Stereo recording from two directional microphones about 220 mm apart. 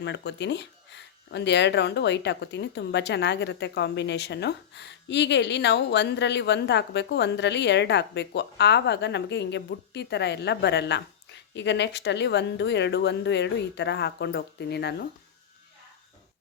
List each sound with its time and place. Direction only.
0.0 s speech: 50° left (ahead or behind)